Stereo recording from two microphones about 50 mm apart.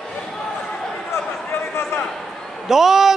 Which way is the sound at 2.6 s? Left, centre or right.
Centre.